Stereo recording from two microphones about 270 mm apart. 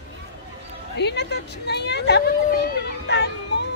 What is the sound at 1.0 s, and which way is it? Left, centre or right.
Speech, left.